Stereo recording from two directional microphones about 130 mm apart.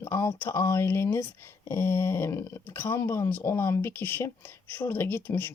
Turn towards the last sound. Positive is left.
turn(degrees=15)  # may be behind; listen again after turning